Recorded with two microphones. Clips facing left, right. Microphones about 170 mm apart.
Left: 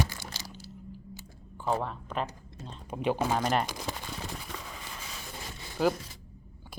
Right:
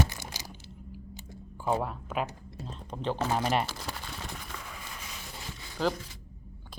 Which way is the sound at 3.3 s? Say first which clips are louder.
Even; 5° right (ahead or behind).